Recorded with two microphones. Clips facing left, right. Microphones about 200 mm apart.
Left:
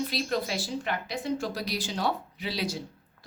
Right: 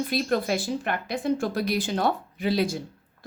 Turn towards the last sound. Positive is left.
turn(degrees=-50)  # may be behind; listen again after turning